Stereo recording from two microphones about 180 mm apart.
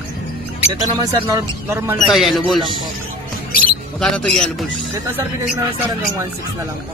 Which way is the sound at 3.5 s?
50° left (ahead or behind).